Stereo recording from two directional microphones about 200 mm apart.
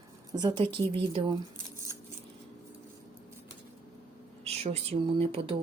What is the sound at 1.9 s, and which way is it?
Scissors, 15° right (ahead or behind).